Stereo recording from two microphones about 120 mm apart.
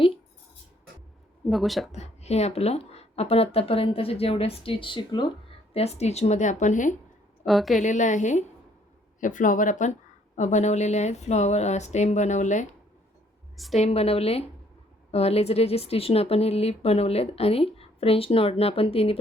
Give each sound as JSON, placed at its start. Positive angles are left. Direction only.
{"t": 1.5, "sound": "speech", "side_deg": 0}
{"t": 1.9, "sound": "a woman's voice", "side_deg": 65}
{"t": 5.7, "sound": "speech", "side_deg": 60}
{"t": 7.4, "sound": "speech", "side_deg": 0}
{"t": 7.8, "sound": "speech", "side_deg": 90}
{"t": 10.3, "sound": "speech", "side_deg": 75}
{"t": 13.7, "sound": "a woman's voice", "side_deg": 60}